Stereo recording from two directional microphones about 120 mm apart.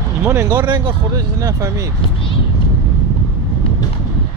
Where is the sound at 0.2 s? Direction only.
20° right (ahead or behind).